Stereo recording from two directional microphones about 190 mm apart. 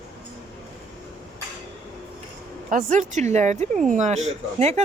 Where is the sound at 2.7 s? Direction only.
45° right (ahead or behind).